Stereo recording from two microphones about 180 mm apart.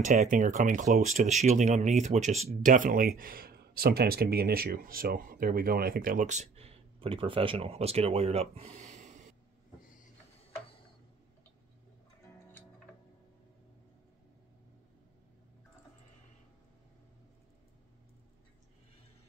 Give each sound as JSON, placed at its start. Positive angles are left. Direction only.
{"t": 0.0, "sound": "speech", "side_deg": -45}